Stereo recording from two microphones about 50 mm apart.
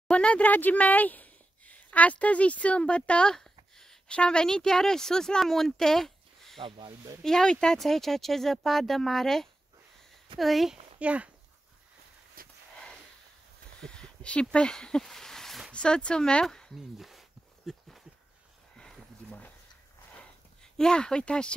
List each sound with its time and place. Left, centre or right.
0.1 s speech: left; by 10.8 s centre
11.0 s speech: right
13.7 s speech: centre
15.0 s a sound: centre
15.7 s speech: centre
16.7 s a sound: centre
20.6 s speech: centre